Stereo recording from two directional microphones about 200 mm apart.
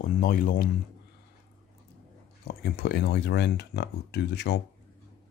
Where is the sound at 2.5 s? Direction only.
55° left (ahead or behind).